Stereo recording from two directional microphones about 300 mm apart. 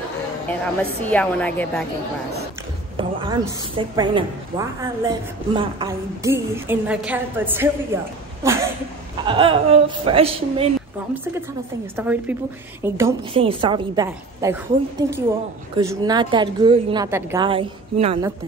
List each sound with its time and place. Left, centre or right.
1.0 s a woman's voice: centre
3.0 s a woman's voice: centre
9.2 s a woman's voice: centre
12.0 s a woman's voice: centre